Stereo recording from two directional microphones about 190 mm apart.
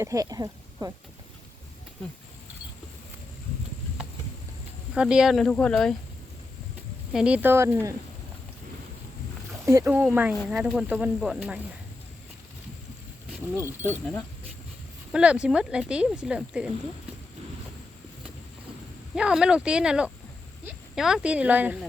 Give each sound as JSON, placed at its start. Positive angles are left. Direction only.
{"t": 0.0, "sound": "speech", "side_deg": -15}
{"t": 4.9, "sound": "speech", "side_deg": -5}
{"t": 7.1, "sound": "speech", "side_deg": -5}
{"t": 9.6, "sound": "speech", "side_deg": -15}
{"t": 13.6, "sound": "speech", "side_deg": -10}
{"t": 15.1, "sound": "speech", "side_deg": -5}
{"t": 19.1, "sound": "speech", "side_deg": -5}